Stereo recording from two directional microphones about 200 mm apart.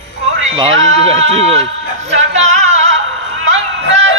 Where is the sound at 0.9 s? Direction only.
30° right (ahead or behind).